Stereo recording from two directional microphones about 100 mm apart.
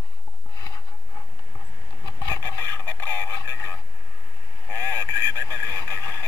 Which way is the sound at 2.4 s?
25° left (ahead or behind).